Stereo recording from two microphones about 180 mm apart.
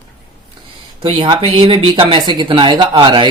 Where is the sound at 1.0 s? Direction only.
30° right (ahead or behind).